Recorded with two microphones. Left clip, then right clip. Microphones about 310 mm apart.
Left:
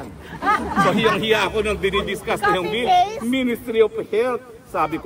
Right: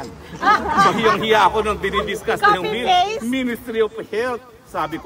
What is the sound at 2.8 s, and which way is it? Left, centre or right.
Speech, right.